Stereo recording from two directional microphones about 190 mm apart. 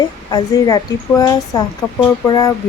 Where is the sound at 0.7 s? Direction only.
20° left (ahead or behind).